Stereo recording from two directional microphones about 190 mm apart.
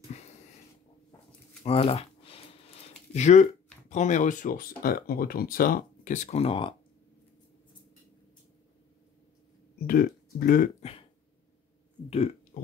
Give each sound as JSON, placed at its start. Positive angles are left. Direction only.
{"t": 1.6, "sound": "a sound", "side_deg": 30}
{"t": 3.9, "sound": "speech", "side_deg": 40}
{"t": 9.8, "sound": "speech", "side_deg": 50}
{"t": 10.8, "sound": "throat clearing", "side_deg": 30}